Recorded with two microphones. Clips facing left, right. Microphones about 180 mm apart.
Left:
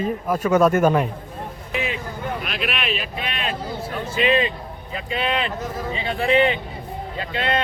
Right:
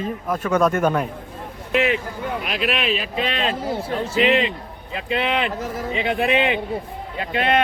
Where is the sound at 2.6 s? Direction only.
35° right (ahead or behind).